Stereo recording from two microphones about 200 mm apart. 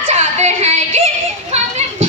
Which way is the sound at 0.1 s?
30° right (ahead or behind).